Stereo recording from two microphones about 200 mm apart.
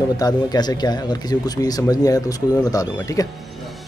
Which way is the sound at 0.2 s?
20° left (ahead or behind).